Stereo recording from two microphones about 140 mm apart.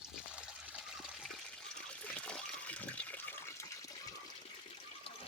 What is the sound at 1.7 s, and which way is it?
Water, 5° left (ahead or behind).